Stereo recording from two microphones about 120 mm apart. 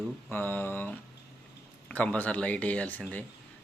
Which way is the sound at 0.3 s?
15° left (ahead or behind).